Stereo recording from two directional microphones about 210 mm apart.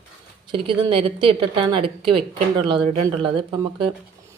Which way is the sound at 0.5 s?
25° right (ahead or behind).